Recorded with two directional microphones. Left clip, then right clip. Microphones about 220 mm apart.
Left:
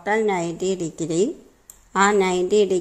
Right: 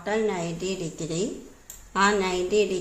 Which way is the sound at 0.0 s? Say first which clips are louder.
Left 5 dB; 35° left (ahead or behind).